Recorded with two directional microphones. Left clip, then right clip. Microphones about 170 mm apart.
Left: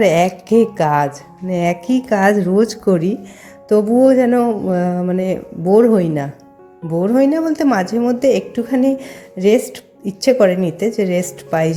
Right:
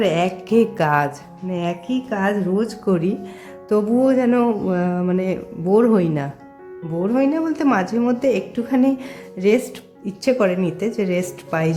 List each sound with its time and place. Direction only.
0.0 s a woman's voice: 15° left (ahead or behind)
1.5 s a woman's voice: 20° left (ahead or behind)